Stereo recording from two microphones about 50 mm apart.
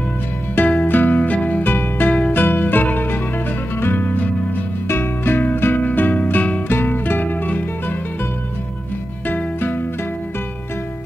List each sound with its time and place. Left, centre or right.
0.6 s music: left
1.6 s music: left
2.1 s music: left
2.4 s music: left
4.8 s music: left
6.7 s music: left
9.3 s music: left